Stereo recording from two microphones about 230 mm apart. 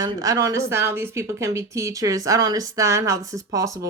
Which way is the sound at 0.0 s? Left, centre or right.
Centre.